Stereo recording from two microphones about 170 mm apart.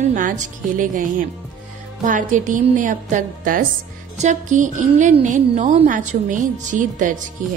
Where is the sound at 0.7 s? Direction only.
50° right (ahead or behind).